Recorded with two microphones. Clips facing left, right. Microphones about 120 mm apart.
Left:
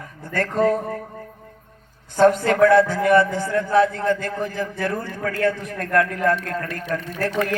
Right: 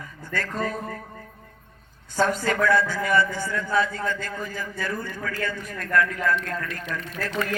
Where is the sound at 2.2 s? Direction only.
55° left (ahead or behind).